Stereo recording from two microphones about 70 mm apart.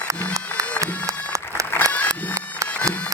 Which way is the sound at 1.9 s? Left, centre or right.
Left.